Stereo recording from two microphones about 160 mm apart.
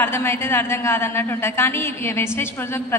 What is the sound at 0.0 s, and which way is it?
A man's voice, 15° left (ahead or behind).